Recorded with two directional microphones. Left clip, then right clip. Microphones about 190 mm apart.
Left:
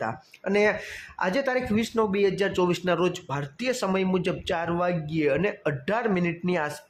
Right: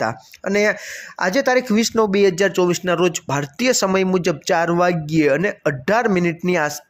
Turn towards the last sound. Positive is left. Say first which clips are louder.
# right 8 dB
turn(degrees=-25)  # may be behind; listen again after turning